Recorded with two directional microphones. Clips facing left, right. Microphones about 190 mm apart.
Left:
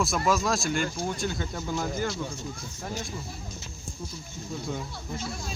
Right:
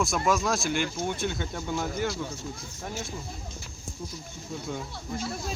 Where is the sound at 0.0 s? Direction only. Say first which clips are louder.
Even; centre (ahead or behind).